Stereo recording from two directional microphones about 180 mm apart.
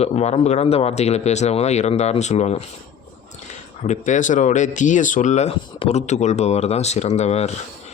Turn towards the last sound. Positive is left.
turn(degrees=35)  # may be behind; listen again after turning